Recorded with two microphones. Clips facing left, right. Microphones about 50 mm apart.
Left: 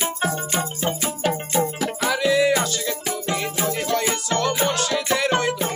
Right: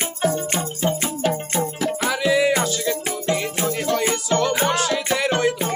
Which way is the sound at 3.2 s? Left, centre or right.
Centre.